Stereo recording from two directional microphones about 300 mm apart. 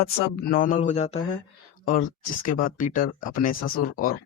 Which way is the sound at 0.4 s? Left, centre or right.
Left.